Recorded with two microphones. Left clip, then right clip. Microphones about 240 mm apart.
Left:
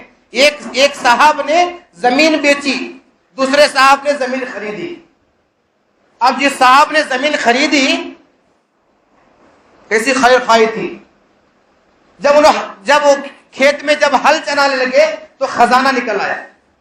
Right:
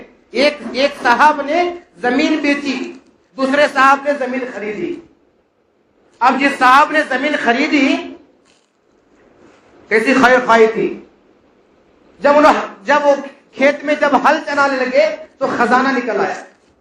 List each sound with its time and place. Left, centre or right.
0.3 s a man's voice: left
6.1 s a man's voice: left
9.9 s a man's voice: left
12.2 s a man's voice: left